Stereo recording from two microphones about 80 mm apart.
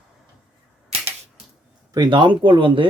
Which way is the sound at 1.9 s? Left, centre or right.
Right.